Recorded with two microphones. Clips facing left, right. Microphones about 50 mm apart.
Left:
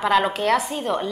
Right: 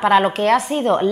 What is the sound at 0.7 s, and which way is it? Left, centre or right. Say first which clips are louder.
Speech: right 8 dB; right.